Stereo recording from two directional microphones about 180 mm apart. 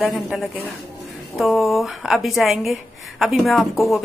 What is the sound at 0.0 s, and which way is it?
A woman's voice, centre (ahead or behind).